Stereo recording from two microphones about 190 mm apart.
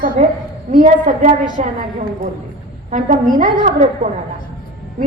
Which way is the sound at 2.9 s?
45° right (ahead or behind).